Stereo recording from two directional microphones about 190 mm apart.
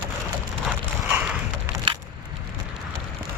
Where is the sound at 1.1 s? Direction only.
5° right (ahead or behind).